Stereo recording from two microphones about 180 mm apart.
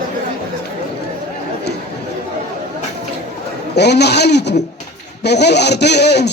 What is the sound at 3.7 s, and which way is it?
Speech, 70° left (ahead or behind).